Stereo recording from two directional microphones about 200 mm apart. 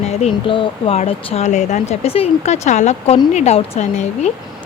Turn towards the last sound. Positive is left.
turn(degrees=35)  # may be behind; listen again after turning